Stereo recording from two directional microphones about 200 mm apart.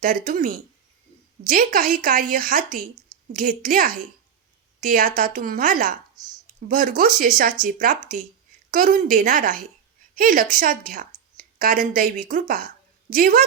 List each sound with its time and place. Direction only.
0.0 s a woman's voice: 45° right (ahead or behind)